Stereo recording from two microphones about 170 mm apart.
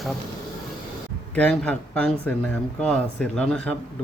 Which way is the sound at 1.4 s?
5° left (ahead or behind).